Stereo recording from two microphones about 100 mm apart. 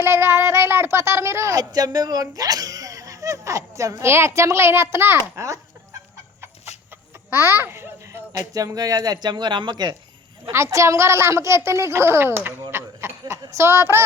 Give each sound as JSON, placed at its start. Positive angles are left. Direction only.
{"t": 0.0, "sound": "speech", "side_deg": -25}
{"t": 6.7, "sound": "chicken", "side_deg": 90}
{"t": 7.3, "sound": "a child's voice", "side_deg": -25}
{"t": 10.5, "sound": "a child's voice", "side_deg": -30}
{"t": 12.7, "sound": "a sound", "side_deg": -25}
{"t": 13.4, "sound": "a child's voice", "side_deg": -30}